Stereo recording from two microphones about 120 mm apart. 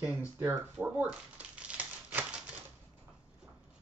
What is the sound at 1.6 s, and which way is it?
Typewriter, 10° right (ahead or behind).